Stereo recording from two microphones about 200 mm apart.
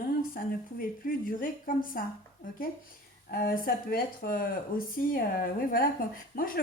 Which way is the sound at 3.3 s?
45° left (ahead or behind).